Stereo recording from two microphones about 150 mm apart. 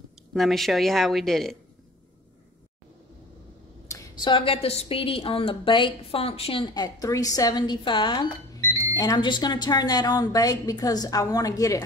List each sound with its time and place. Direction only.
0.3 s speech: centre (ahead or behind)
3.9 s a woman's voice: 30° left (ahead or behind)